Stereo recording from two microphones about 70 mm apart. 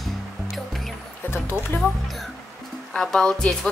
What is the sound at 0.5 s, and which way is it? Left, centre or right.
Music, centre.